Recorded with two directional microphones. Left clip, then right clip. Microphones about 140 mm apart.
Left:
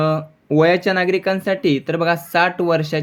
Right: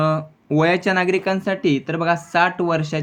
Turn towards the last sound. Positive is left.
turn(degrees=20)  # may be behind; listen again after turning